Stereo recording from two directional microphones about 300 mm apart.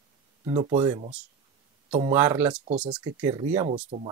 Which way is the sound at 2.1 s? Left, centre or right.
Centre.